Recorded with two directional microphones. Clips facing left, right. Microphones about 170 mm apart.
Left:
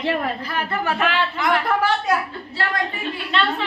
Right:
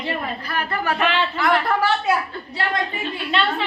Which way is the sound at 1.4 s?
20° left (ahead or behind).